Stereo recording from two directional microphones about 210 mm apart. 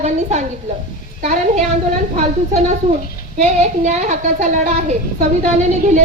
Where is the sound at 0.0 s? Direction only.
30° right (ahead or behind).